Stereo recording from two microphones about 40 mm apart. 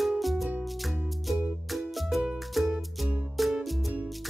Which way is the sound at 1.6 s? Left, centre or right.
Centre.